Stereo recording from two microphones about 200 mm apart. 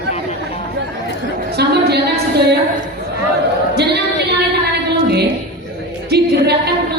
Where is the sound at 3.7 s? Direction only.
55° right (ahead or behind).